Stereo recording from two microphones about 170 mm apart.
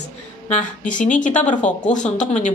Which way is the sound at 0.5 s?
45° left (ahead or behind).